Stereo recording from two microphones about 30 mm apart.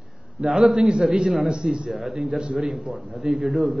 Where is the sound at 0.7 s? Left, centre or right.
Right.